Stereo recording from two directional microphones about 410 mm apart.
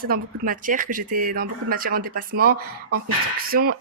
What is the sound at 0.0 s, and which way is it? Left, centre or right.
Speech, right.